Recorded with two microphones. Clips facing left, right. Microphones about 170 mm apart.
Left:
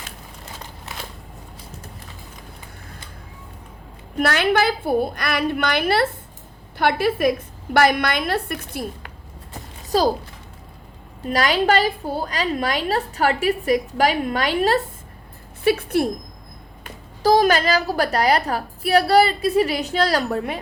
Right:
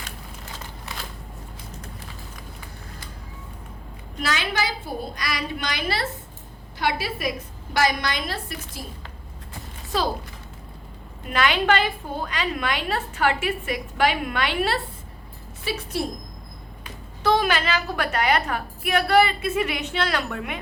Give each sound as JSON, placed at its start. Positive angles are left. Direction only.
{"t": 4.2, "sound": "a woman's voice", "side_deg": 60}
{"t": 9.9, "sound": "a woman's voice", "side_deg": 40}
{"t": 11.3, "sound": "a woman's voice", "side_deg": 40}
{"t": 15.6, "sound": "a woman's voice", "side_deg": 60}
{"t": 17.2, "sound": "a woman's voice", "side_deg": 40}